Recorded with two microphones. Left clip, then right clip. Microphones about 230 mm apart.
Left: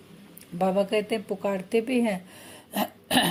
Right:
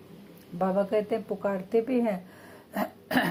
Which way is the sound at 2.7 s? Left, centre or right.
Left.